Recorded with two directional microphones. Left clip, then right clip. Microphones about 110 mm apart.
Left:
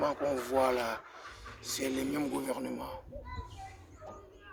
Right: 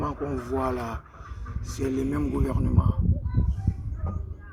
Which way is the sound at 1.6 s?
35° left (ahead or behind).